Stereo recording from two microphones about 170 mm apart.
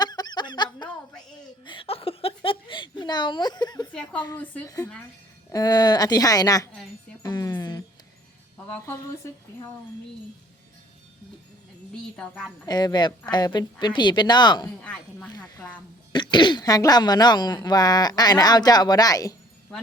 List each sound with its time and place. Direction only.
0.0 s snicker: 25° left (ahead or behind)
1.6 s speech: 30° left (ahead or behind)
3.9 s speech: 10° left (ahead or behind)
7.2 s music: 20° left (ahead or behind)
8.5 s speech: 10° left (ahead or behind)
12.1 s speech: 5° left (ahead or behind)
12.6 s speech: 25° left (ahead or behind)
14.8 s speech: 5° left (ahead or behind)
15.3 s speech: 25° left (ahead or behind)